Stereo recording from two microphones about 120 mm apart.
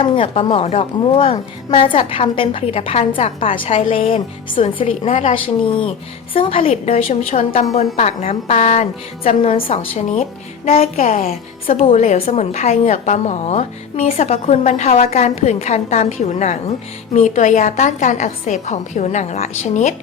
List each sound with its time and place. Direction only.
0.0 s a woman's voice: 45° left (ahead or behind)
10.7 s a woman's voice: 90° left; by 19.9 s 70° left (ahead or behind)